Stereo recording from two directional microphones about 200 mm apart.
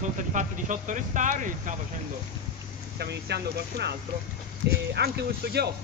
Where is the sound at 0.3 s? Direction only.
40° right (ahead or behind).